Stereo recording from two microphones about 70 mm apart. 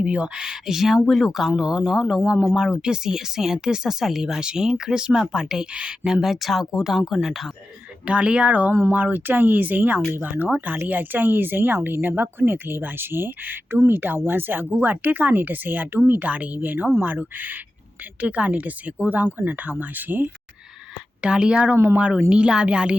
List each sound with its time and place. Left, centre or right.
0.0 s speech: centre
6.2 s speech: centre
8.0 s speech: centre
21.2 s speech: centre